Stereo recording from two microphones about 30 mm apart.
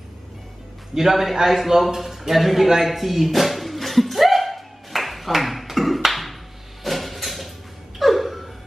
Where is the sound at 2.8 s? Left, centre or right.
Centre.